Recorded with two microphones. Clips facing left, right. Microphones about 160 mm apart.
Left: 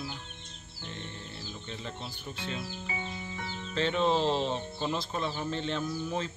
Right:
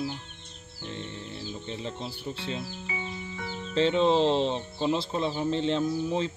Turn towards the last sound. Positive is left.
turn(degrees=-25)  # may be behind; listen again after turning